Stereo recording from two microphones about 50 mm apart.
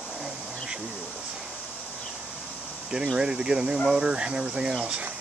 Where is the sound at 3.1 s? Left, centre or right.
Centre.